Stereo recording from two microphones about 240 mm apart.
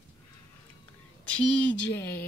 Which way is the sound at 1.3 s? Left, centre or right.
Centre.